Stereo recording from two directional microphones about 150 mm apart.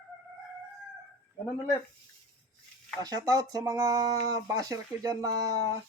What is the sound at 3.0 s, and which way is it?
Speech, 25° right (ahead or behind).